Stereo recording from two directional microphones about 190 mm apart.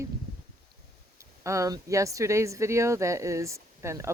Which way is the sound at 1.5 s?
15° right (ahead or behind).